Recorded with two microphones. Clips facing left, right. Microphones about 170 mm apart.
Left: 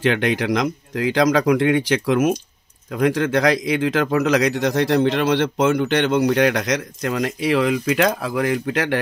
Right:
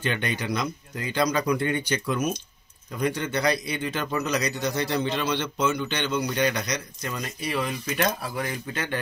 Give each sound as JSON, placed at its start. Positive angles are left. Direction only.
{"t": 0.0, "sound": "speech", "side_deg": 90}